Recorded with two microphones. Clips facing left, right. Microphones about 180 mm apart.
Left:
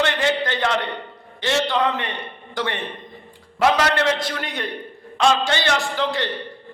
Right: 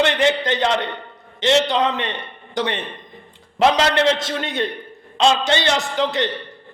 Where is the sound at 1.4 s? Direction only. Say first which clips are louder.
Right 4 dB; 20° right (ahead or behind).